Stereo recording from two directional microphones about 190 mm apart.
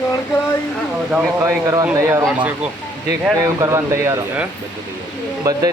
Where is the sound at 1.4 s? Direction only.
15° right (ahead or behind).